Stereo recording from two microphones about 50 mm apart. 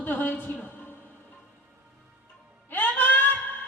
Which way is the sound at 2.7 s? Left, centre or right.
Left.